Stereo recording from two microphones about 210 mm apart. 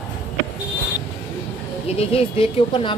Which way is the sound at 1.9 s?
25° left (ahead or behind).